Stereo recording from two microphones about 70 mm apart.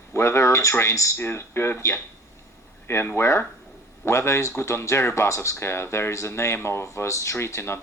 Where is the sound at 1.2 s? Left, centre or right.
Left.